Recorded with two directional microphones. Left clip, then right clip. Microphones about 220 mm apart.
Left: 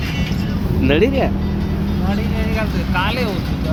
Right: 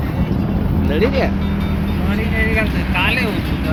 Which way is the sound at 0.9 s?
35° left (ahead or behind).